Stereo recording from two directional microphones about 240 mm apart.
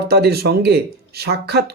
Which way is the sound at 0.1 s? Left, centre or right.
Right.